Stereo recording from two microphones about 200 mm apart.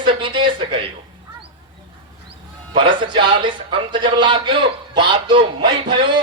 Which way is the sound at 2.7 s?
25° right (ahead or behind).